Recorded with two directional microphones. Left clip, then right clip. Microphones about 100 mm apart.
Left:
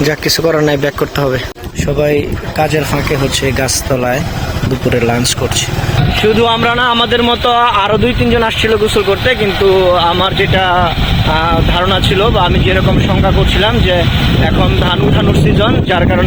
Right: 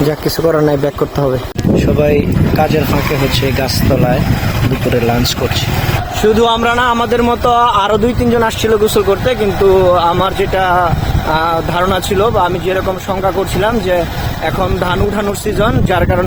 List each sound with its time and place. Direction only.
6.2 s speech: 20° right (ahead or behind)
6.8 s speech: centre (ahead or behind)
7.5 s speech: 25° right (ahead or behind)
8.7 s speech: 5° right (ahead or behind)
11.3 s speech: centre (ahead or behind)
15.9 s speech: 5° right (ahead or behind)